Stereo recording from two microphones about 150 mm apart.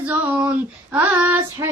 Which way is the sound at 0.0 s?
10° right (ahead or behind).